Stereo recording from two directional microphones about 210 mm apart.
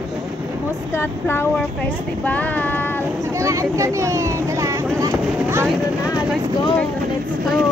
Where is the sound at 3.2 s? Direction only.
15° right (ahead or behind).